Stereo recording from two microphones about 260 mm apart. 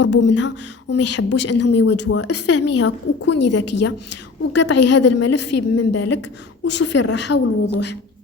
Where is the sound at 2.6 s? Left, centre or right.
Left.